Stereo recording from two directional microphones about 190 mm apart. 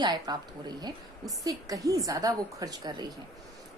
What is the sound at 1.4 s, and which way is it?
A woman's voice, 20° right (ahead or behind).